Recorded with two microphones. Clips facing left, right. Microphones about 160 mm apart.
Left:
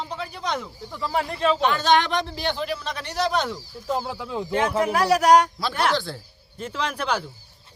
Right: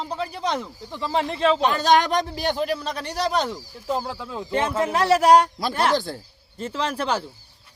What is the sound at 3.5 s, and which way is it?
Speech, 10° right (ahead or behind).